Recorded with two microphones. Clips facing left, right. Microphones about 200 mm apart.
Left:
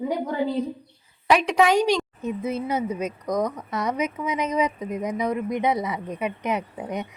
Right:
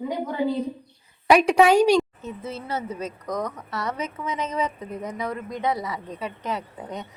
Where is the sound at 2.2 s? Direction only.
15° left (ahead or behind).